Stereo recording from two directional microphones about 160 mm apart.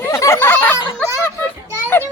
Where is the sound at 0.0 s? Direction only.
15° left (ahead or behind).